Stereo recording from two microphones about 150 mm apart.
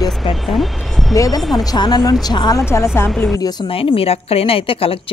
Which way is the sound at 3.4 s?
30° left (ahead or behind).